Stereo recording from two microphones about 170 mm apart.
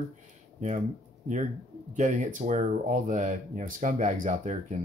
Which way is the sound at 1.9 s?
45° right (ahead or behind).